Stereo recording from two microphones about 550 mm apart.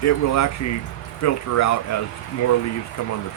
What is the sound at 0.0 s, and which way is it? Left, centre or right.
Speech, left.